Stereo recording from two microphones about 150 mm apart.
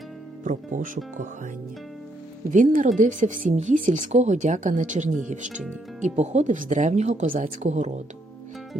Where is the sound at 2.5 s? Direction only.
60° right (ahead or behind).